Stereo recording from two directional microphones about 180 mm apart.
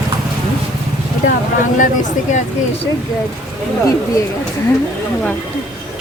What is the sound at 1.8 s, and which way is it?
Speech, 45° left (ahead or behind).